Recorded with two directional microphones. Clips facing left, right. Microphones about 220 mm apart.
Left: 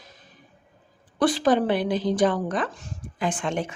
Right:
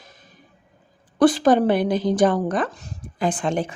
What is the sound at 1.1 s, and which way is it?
Speech, 45° right (ahead or behind).